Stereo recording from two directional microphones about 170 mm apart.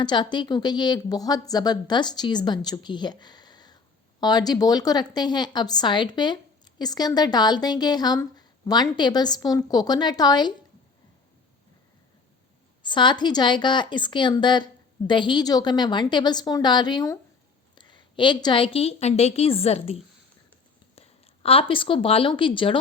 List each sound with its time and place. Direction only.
0.0 s a woman's voice: 25° left (ahead or behind)
12.8 s a woman's voice: 25° left (ahead or behind)